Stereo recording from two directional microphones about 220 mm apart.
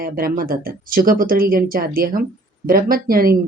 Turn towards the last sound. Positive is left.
turn(degrees=-40)  # may be behind; listen again after turning